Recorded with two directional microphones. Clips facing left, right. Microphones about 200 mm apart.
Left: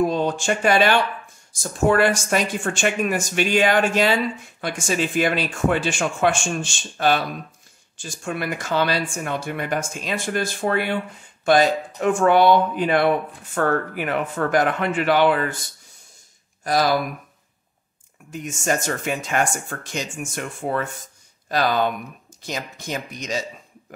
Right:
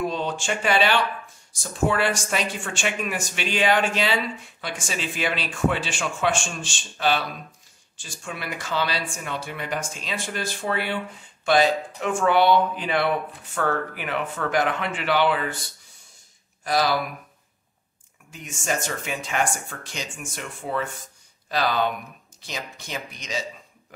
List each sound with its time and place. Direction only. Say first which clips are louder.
0.0 s speech: left 6 dB; 45° left (ahead or behind)
16.6 s speech: left 3 dB; 45° left (ahead or behind)
18.3 s speech: left 5 dB; 45° left (ahead or behind)